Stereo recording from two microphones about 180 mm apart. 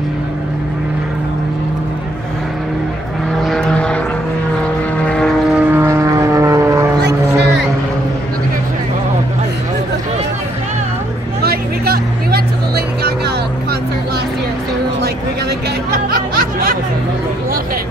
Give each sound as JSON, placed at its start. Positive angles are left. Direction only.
{"t": 3.4, "sound": "vehicle", "side_deg": 5}
{"t": 5.7, "sound": "vehicle", "side_deg": -15}
{"t": 11.4, "sound": "music", "side_deg": -60}
{"t": 16.1, "sound": "music", "side_deg": -55}